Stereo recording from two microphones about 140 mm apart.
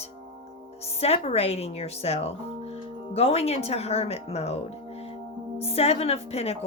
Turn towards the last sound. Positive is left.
turn(degrees=45)  # may be behind; listen again after turning